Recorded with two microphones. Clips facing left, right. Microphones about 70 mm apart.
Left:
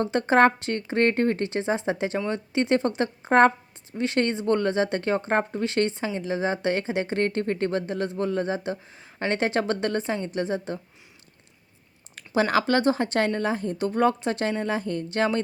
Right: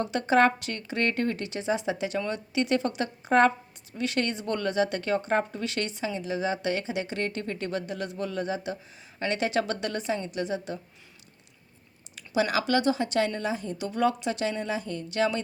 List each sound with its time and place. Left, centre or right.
0.0 s speech: left
12.1 s speech: left